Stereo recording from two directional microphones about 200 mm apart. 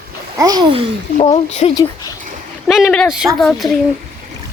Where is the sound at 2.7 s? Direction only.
Centre (ahead or behind).